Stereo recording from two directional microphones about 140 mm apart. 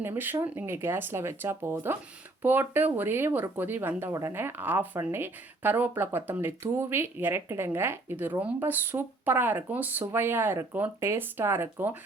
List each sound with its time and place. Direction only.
0.0 s speech: 15° right (ahead or behind)